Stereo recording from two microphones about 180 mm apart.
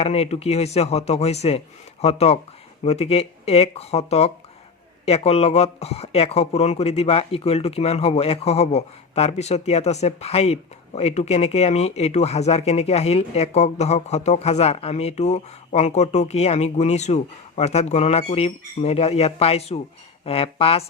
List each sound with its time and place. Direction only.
0.0 s speech: 35° left (ahead or behind)